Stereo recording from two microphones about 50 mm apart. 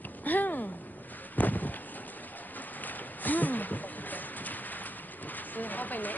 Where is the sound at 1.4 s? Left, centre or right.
Left.